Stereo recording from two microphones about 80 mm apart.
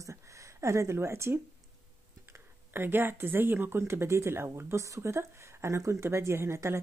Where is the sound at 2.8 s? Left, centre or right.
Right.